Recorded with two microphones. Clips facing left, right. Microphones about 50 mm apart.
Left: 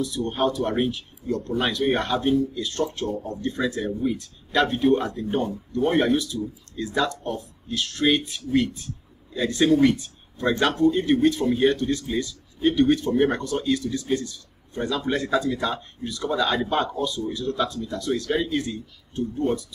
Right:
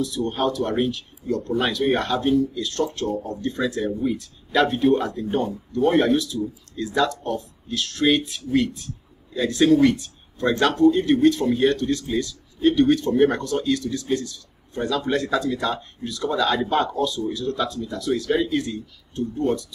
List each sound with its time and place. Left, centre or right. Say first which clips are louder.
0.0 s speech: right 1 dB; centre